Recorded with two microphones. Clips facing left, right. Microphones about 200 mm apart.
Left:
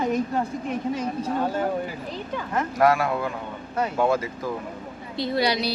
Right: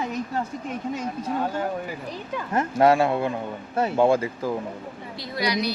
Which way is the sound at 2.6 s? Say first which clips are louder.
Right 2 dB; 25° right (ahead or behind).